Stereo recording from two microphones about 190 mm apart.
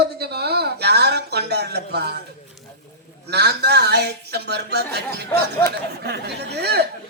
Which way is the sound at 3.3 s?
60° right (ahead or behind).